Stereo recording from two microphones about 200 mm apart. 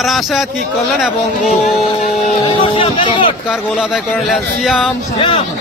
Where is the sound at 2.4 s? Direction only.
25° left (ahead or behind).